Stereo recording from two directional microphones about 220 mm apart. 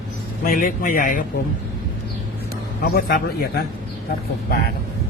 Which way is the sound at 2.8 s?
45° left (ahead or behind).